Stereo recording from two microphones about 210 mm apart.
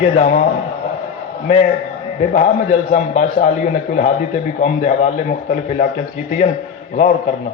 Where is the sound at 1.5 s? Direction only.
35° left (ahead or behind).